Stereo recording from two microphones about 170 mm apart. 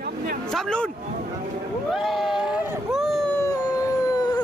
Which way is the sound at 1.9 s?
Centre (ahead or behind).